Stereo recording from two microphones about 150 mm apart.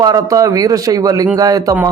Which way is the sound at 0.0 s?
25° right (ahead or behind).